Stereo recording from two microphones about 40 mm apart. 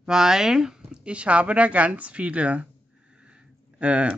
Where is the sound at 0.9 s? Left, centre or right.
Right.